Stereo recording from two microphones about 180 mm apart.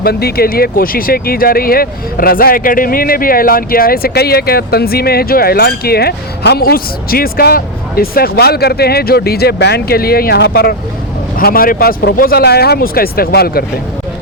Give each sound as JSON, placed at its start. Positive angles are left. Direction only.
{"t": 0.0, "sound": "speech", "side_deg": 60}